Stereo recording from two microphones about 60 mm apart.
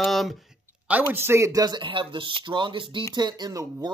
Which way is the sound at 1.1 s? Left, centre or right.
Right.